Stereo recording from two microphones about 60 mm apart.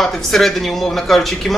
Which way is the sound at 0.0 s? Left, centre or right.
Centre.